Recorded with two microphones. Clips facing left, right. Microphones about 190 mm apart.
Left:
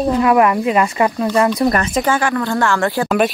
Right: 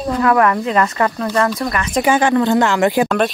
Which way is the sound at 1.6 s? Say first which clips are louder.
Left 5 dB; 35° left (ahead or behind).